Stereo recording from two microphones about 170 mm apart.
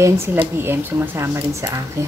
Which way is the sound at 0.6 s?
15° right (ahead or behind).